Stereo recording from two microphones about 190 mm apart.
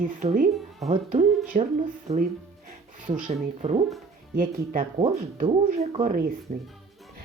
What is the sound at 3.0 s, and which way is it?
Speech, 45° right (ahead or behind).